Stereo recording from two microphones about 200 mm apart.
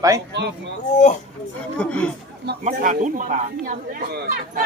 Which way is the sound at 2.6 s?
40° right (ahead or behind).